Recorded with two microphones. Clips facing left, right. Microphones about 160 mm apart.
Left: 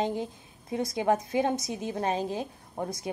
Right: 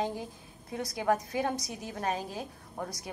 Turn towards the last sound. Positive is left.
turn(degrees=20)  # may be behind; listen again after turning